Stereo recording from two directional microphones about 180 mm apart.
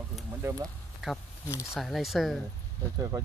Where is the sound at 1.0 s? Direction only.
5° right (ahead or behind).